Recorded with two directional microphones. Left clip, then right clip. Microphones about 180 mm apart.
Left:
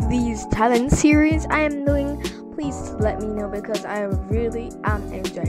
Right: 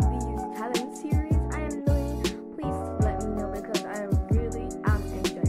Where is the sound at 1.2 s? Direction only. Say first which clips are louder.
Left 14 dB; 65° left (ahead or behind).